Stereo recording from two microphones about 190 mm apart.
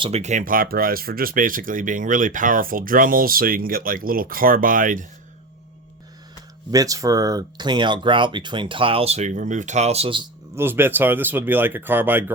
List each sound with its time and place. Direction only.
0.0 s speech: 35° right (ahead or behind)
6.7 s speech: 20° right (ahead or behind)
10.5 s speech: 10° right (ahead or behind)